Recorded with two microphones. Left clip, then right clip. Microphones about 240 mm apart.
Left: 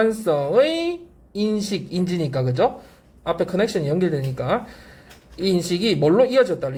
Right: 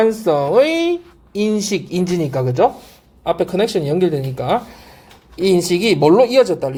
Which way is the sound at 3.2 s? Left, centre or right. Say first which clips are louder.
Right 4 dB; centre.